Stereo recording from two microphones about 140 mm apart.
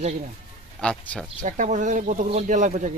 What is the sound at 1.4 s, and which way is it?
Speech, 65° right (ahead or behind).